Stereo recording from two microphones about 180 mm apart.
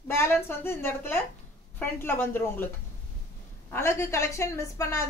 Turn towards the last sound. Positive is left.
turn(degrees=15)  # may be behind; listen again after turning